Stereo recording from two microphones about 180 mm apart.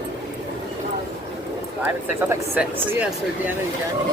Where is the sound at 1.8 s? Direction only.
15° right (ahead or behind).